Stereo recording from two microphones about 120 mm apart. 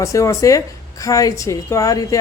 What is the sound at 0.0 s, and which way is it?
Speech, 25° left (ahead or behind).